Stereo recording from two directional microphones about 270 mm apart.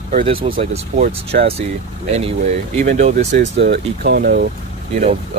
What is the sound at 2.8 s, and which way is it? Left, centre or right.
Speech, right.